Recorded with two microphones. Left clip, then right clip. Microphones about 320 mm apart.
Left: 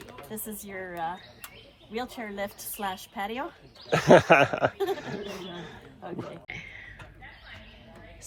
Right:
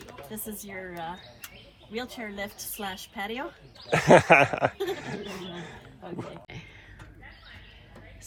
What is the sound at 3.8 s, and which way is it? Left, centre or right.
Speech, centre.